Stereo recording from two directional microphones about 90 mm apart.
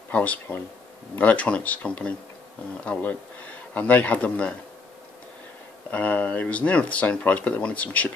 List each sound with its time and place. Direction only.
0.1 s speech: 15° left (ahead or behind)
5.9 s speech: 20° left (ahead or behind)